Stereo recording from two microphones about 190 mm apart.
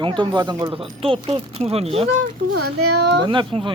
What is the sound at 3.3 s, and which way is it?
Speech, 25° right (ahead or behind).